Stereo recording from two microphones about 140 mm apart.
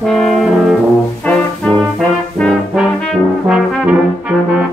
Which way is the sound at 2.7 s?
5° right (ahead or behind).